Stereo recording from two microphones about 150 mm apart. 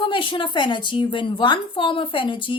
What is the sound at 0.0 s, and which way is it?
A woman's voice, 35° left (ahead or behind).